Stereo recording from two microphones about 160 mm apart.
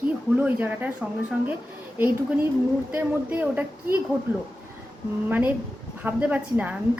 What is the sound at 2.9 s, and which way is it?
A woman's voice, 10° right (ahead or behind).